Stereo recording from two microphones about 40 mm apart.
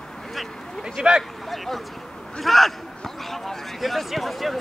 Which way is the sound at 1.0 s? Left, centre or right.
Right.